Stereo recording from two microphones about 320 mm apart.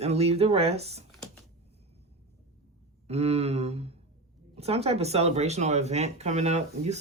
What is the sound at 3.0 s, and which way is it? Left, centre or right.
Speech, centre.